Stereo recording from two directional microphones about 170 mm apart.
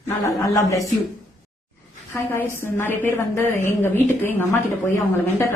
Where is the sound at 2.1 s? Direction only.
15° left (ahead or behind).